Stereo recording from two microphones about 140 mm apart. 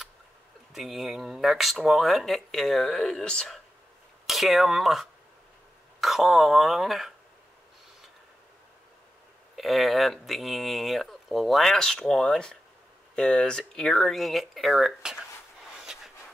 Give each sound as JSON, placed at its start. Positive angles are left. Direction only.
{"t": 0.7, "sound": "speech", "side_deg": 0}
{"t": 9.6, "sound": "speech", "side_deg": 0}
{"t": 15.7, "sound": "a sound", "side_deg": -5}